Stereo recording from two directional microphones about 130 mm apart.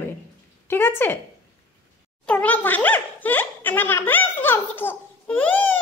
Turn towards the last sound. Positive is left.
turn(degrees=15)  # may be behind; listen again after turning